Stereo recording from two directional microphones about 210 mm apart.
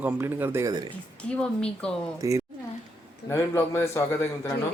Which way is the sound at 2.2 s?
15° right (ahead or behind).